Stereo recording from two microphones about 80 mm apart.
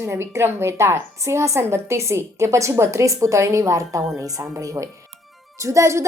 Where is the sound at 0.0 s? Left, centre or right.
Right.